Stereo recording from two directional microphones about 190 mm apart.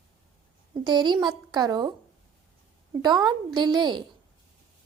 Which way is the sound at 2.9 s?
20° right (ahead or behind).